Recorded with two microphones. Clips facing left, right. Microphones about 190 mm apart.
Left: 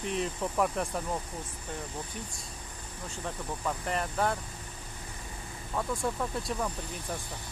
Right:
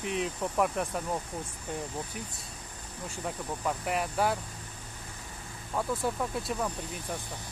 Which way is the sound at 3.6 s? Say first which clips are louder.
Right 2 dB; 10° right (ahead or behind).